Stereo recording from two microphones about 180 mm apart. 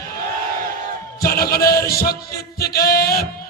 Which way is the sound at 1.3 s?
60° left (ahead or behind).